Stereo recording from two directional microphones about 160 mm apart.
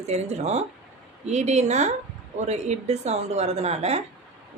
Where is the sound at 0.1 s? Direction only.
45° right (ahead or behind).